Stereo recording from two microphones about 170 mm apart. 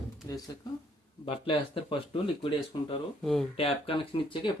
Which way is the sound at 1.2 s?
30° left (ahead or behind).